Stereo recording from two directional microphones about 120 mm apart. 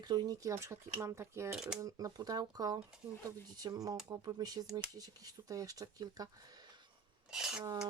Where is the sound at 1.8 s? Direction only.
30° right (ahead or behind).